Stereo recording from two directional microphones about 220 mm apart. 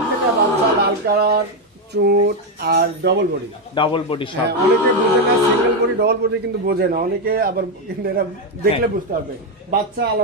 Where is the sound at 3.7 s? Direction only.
25° left (ahead or behind).